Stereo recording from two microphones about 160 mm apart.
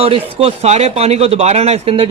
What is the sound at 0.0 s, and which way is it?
Speech, 40° right (ahead or behind).